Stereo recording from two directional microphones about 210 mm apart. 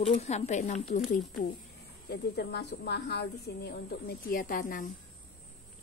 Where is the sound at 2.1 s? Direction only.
50° left (ahead or behind).